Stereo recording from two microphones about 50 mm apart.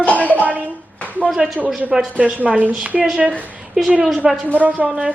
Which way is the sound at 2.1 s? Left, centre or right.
Right.